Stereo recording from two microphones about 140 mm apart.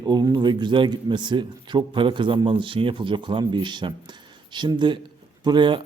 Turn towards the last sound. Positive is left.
turn(degrees=-35)  # may be behind; listen again after turning